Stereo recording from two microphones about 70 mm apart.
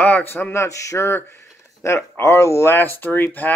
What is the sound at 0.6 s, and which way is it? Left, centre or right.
Speech, left.